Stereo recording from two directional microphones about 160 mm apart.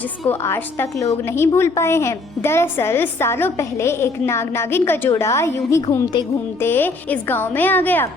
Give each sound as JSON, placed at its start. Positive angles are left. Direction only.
{"t": 0.3, "sound": "a woman's voice", "side_deg": 15}